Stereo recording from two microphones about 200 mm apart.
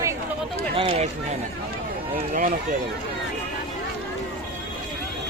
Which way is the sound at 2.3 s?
40° right (ahead or behind).